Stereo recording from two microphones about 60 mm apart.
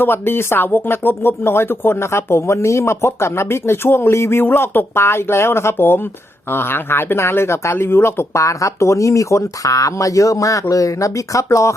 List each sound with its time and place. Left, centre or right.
0.0 s speech: left